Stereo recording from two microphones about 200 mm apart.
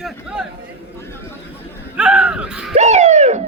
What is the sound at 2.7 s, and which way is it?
Bird, 35° right (ahead or behind).